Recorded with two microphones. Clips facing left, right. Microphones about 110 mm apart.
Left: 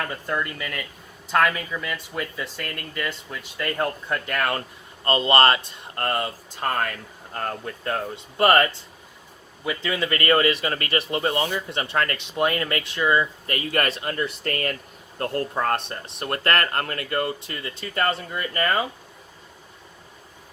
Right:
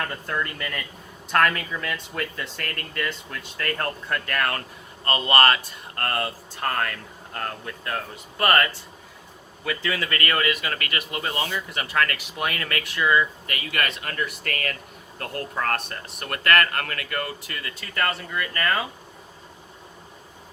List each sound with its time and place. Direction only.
0.0 s speech: 5° left (ahead or behind); by 18.9 s 25° left (ahead or behind)